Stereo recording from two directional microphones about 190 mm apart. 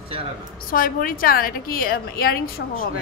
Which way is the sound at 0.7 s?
50° left (ahead or behind).